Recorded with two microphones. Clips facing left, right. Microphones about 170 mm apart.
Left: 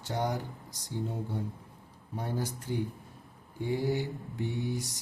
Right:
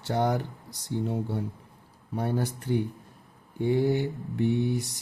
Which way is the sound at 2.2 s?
65° right (ahead or behind).